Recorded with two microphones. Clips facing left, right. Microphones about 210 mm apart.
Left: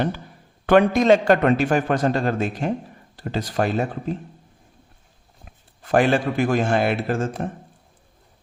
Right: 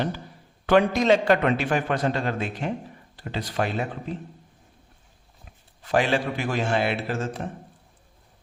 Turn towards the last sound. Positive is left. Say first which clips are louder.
# left 5 dB
turn(degrees=50)  # may be behind; listen again after turning